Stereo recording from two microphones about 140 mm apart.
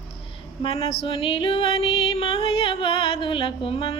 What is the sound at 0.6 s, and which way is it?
Female singing, 45° left (ahead or behind).